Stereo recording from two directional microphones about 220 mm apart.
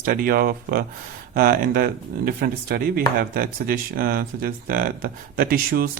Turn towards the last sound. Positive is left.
turn(degrees=-40)  # may be behind; listen again after turning